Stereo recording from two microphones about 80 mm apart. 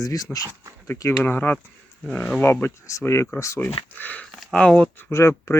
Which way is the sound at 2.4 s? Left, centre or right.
Left.